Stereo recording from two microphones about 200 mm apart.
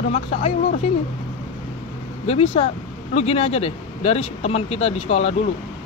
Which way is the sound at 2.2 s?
30° left (ahead or behind).